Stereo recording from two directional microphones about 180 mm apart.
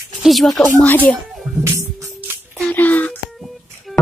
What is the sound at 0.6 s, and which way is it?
Speech, 10° left (ahead or behind).